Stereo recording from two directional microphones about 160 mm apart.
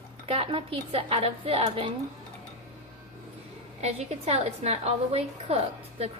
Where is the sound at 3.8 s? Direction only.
40° right (ahead or behind).